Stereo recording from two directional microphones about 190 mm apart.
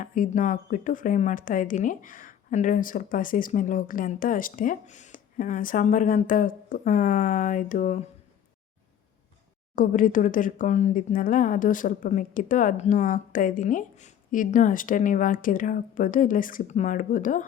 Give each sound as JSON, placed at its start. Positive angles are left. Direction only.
{"t": 0.0, "sound": "a woman's voice", "side_deg": 45}
{"t": 9.7, "sound": "a woman's voice", "side_deg": 45}